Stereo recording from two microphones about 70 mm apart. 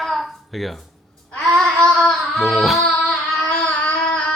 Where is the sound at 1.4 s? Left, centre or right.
Centre.